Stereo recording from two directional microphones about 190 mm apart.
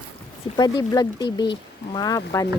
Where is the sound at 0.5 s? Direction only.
20° left (ahead or behind).